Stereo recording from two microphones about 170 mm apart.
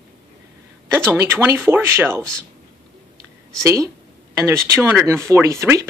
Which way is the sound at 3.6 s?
15° right (ahead or behind).